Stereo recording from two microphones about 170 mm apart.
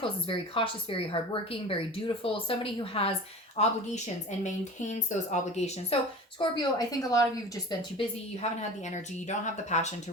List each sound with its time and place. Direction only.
0.0 s a woman's voice: 30° left (ahead or behind)
4.9 s speech: 45° left (ahead or behind)
6.4 s a woman's voice: 25° left (ahead or behind)
8.4 s a woman's voice: 40° left (ahead or behind)